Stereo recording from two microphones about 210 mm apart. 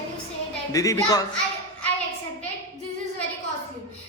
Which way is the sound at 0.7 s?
15° left (ahead or behind).